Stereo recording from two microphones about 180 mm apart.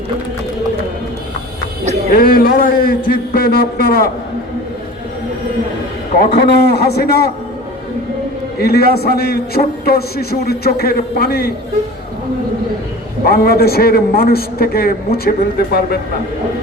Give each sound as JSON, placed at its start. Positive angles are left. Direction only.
{"t": 2.1, "sound": "a man's voice", "side_deg": 55}
{"t": 6.1, "sound": "a man's voice", "side_deg": 65}
{"t": 8.6, "sound": "a man's voice", "side_deg": 60}
{"t": 13.2, "sound": "a man's voice", "side_deg": 60}